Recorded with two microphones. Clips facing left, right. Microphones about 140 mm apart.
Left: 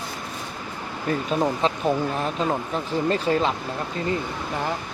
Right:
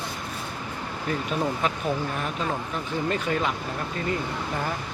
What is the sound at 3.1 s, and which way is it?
Speech, 35° left (ahead or behind).